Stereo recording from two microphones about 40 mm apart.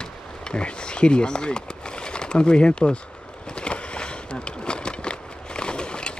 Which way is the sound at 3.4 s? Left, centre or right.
Left.